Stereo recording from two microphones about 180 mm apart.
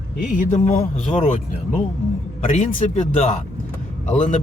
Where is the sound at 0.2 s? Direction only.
45° left (ahead or behind).